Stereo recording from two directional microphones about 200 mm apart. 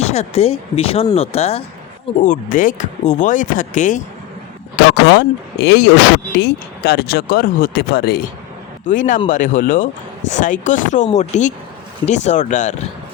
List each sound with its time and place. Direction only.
0.0 s speech: 30° left (ahead or behind)
2.2 s speech: 40° left (ahead or behind)
4.9 s speech: 55° left (ahead or behind)
8.9 s speech: 40° left (ahead or behind)